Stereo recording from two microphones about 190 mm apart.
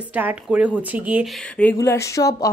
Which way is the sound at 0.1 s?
10° right (ahead or behind).